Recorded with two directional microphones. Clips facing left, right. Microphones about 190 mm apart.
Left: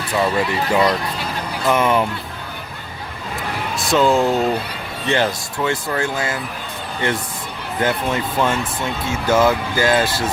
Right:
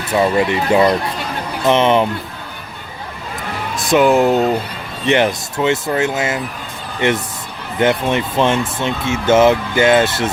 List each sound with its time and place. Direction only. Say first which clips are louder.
0.3 s speech: right 4 dB; 20° right (ahead or behind)
3.8 s speech: right 4 dB; 15° right (ahead or behind)